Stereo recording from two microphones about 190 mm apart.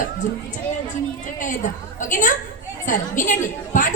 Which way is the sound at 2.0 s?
40° left (ahead or behind).